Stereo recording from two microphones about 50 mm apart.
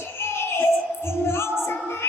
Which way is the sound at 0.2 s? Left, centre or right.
Left.